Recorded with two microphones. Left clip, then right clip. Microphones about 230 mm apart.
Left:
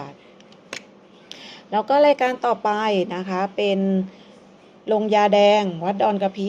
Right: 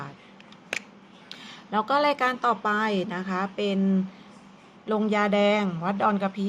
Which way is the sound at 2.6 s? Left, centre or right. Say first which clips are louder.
Left 4 dB; right.